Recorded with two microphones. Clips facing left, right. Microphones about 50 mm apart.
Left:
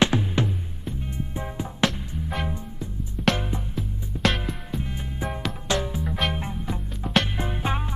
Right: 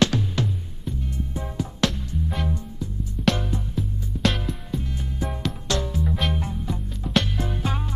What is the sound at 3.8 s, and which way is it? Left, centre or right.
Music, centre.